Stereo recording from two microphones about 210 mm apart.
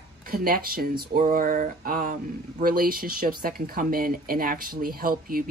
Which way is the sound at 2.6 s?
45° right (ahead or behind).